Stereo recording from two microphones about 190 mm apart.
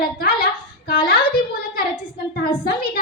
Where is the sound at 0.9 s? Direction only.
55° left (ahead or behind).